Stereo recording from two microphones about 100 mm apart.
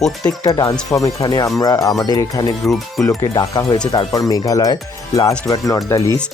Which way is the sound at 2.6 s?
Centre (ahead or behind).